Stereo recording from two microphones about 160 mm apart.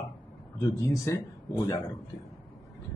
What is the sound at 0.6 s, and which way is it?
Speech, 20° left (ahead or behind).